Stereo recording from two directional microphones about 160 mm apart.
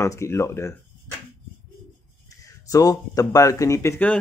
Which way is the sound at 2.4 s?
20° left (ahead or behind).